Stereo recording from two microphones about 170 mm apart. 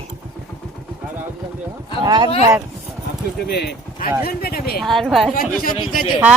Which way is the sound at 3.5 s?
75° left (ahead or behind).